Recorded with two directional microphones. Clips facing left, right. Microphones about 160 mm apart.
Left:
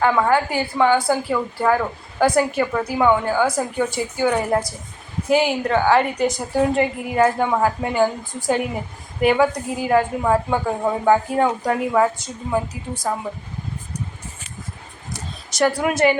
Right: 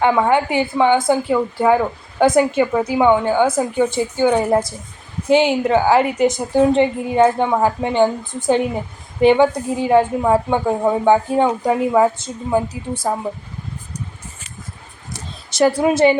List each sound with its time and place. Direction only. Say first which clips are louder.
0.0 s a woman's voice: right 2 dB; 20° right (ahead or behind)
15.4 s a woman's voice: right 4 dB; 25° right (ahead or behind)